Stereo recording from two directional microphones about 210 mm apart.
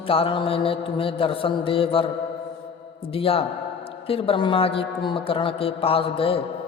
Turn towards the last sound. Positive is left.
turn(degrees=25)  # may be behind; listen again after turning